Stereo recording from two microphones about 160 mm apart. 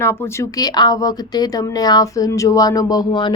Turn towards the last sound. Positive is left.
turn(degrees=30)  # may be behind; listen again after turning